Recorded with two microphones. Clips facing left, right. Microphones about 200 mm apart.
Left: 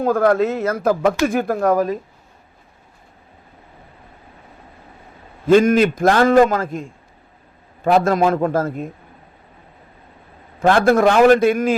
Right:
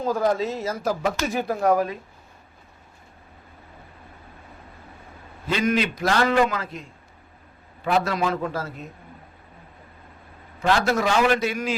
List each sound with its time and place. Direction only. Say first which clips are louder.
0.0 s speech: left 7 dB; 60° left (ahead or behind); by 2.0 s 45° left (ahead or behind)
5.5 s a man's voice: left 10 dB; 50° left (ahead or behind)
7.9 s a man's voice: left 8 dB; 50° left (ahead or behind)
10.6 s a man's voice: left 8 dB; 50° left (ahead or behind)